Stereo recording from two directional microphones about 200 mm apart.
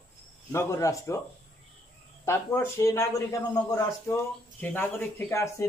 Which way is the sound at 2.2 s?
15° left (ahead or behind).